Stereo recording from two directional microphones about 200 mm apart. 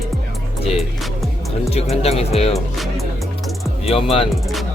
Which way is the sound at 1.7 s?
30° left (ahead or behind).